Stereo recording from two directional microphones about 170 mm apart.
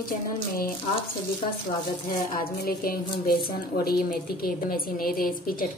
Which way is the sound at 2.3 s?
60° left (ahead or behind).